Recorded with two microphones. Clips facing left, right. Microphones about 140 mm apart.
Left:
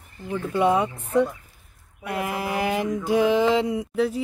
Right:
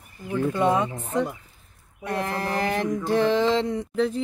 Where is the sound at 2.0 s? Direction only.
10° left (ahead or behind).